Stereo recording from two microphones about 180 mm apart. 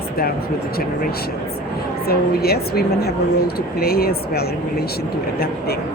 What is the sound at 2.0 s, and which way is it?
A woman's voice, 60° left (ahead or behind).